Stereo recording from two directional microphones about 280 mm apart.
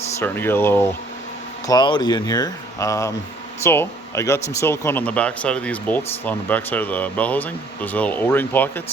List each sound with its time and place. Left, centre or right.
0.2 s speech: centre